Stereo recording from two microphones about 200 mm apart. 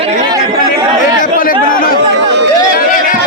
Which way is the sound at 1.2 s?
45° left (ahead or behind).